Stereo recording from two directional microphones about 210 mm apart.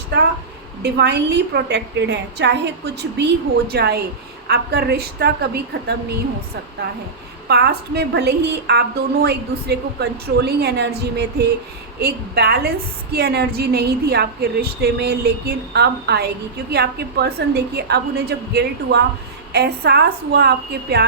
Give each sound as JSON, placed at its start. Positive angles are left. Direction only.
{"t": 0.1, "sound": "a sound", "side_deg": -55}
{"t": 0.8, "sound": "a woman's voice", "side_deg": -50}
{"t": 7.4, "sound": "a woman's voice", "side_deg": -50}